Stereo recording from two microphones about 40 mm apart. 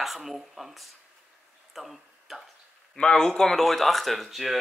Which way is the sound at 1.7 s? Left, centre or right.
Centre.